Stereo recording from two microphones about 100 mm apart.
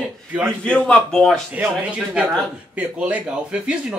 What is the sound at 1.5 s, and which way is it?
Speech, 15° right (ahead or behind).